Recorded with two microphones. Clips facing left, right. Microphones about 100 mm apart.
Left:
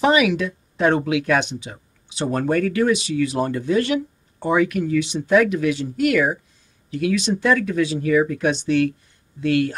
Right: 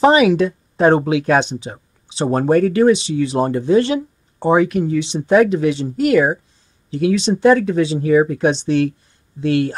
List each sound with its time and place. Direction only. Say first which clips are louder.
0.0 s speech: right 5 dB; 35° right (ahead or behind)